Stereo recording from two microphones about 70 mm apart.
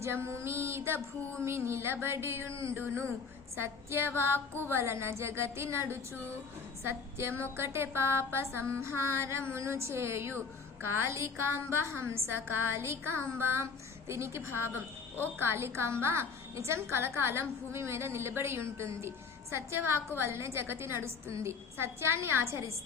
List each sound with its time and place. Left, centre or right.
0.0 s a woman's voice: right